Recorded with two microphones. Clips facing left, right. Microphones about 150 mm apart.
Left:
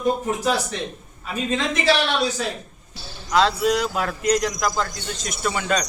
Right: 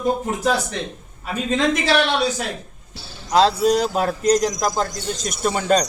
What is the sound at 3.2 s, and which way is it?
Speech, 35° right (ahead or behind).